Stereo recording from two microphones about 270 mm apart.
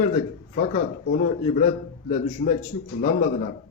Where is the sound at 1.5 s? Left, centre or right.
Left.